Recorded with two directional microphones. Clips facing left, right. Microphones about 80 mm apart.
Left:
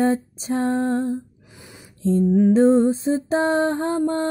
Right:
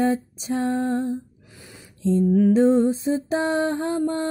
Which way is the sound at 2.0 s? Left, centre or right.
Left.